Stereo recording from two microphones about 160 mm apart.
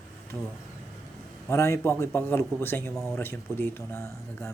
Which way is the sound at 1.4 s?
15° left (ahead or behind).